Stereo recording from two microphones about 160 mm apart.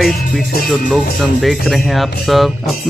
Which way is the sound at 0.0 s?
Centre (ahead or behind).